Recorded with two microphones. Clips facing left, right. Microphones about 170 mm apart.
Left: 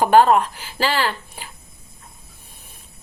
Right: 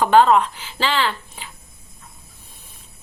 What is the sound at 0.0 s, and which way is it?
Speech, 45° left (ahead or behind).